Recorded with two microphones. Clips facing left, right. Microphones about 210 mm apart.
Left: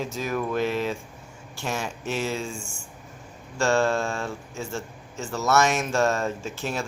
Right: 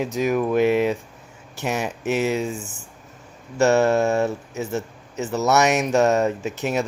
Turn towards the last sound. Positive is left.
turn(degrees=-20)  # may be behind; listen again after turning